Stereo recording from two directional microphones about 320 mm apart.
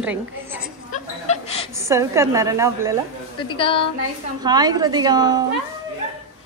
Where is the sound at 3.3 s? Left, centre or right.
Centre.